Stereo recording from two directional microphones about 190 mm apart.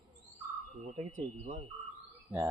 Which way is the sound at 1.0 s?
40° right (ahead or behind).